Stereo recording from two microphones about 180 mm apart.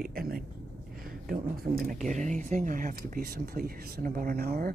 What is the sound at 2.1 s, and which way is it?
Speech, 40° right (ahead or behind).